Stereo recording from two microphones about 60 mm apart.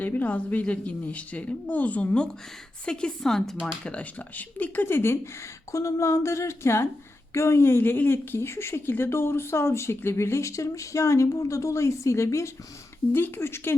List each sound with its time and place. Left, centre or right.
0.0 s a woman's voice: left; by 3.7 s centre
3.8 s a woman's voice: left
5.7 s speech: left
13.1 s speech: left